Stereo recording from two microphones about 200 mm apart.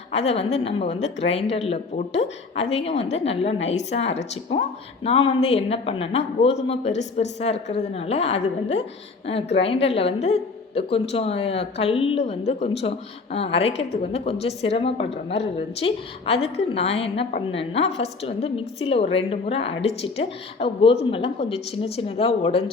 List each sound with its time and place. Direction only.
0.1 s a woman's voice: 30° left (ahead or behind)